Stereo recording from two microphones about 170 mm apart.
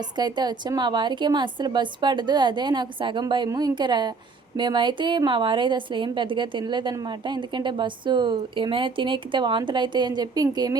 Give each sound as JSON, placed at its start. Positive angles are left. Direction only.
{"t": 0.2, "sound": "a woman's voice", "side_deg": -25}